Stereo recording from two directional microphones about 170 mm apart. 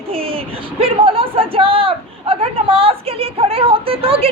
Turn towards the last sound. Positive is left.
turn(degrees=-35)  # may be behind; listen again after turning